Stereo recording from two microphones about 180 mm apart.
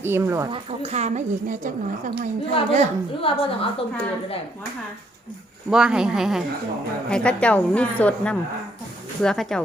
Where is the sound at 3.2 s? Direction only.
30° left (ahead or behind).